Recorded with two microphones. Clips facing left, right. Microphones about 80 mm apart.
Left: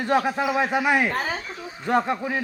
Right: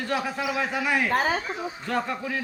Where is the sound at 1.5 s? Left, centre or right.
Right.